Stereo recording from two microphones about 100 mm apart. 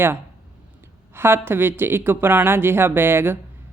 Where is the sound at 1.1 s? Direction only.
20° right (ahead or behind).